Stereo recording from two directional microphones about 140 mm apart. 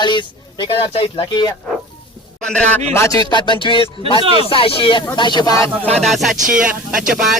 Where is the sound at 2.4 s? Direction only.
5° left (ahead or behind).